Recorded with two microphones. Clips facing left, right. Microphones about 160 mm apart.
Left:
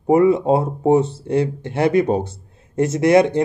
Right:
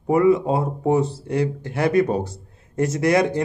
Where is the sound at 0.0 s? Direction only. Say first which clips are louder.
Left 3 dB; 25° left (ahead or behind).